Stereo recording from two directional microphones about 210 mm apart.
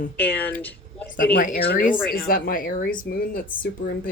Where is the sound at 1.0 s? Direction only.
45° left (ahead or behind).